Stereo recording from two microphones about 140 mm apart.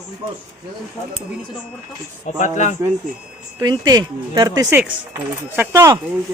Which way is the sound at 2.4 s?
60° left (ahead or behind).